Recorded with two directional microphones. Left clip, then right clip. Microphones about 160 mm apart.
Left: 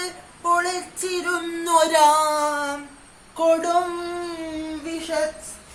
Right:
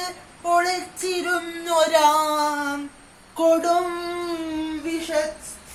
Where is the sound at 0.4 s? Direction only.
15° left (ahead or behind).